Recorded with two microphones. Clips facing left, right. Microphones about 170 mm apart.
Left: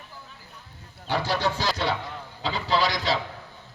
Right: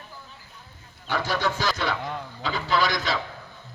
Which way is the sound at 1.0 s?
30° left (ahead or behind).